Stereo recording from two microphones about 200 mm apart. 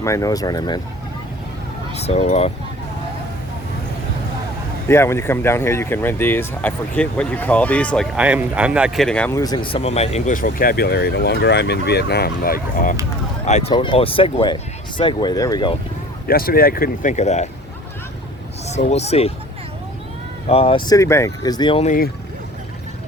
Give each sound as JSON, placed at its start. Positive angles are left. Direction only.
{"t": 0.0, "sound": "speech", "side_deg": 15}
{"t": 2.0, "sound": "speech", "side_deg": 30}
{"t": 4.9, "sound": "speech", "side_deg": 15}
{"t": 8.1, "sound": "speech", "side_deg": -5}
{"t": 9.4, "sound": "speech", "side_deg": 20}
{"t": 13.4, "sound": "speech", "side_deg": 30}
{"t": 16.2, "sound": "speech", "side_deg": 50}
{"t": 18.7, "sound": "speech", "side_deg": 35}
{"t": 20.5, "sound": "speech", "side_deg": 30}
{"t": 21.8, "sound": "speech", "side_deg": 45}